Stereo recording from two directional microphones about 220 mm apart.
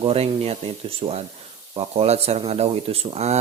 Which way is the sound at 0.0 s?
25° right (ahead or behind).